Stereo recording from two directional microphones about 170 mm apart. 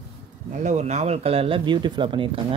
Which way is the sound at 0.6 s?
45° right (ahead or behind).